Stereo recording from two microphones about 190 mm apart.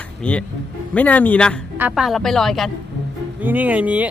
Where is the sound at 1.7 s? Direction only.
5° right (ahead or behind).